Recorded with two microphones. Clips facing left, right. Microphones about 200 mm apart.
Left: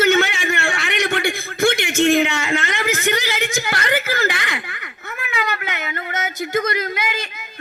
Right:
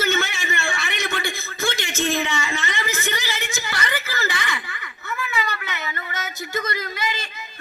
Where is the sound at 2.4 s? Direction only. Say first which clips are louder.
Left 6 dB; 55° left (ahead or behind).